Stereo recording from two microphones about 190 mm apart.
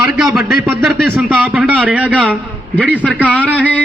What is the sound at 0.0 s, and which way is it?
A man's voice, 5° right (ahead or behind).